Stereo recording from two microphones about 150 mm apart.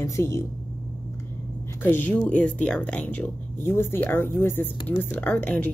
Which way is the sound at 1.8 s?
10° left (ahead or behind).